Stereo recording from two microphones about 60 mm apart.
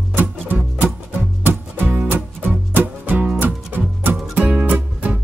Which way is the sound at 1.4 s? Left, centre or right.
Right.